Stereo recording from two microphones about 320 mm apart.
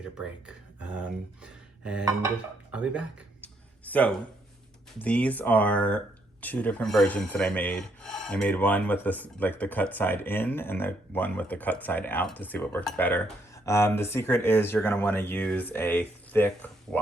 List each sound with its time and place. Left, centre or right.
0.0 s speech: centre
3.9 s rub: centre
16.9 s speech: centre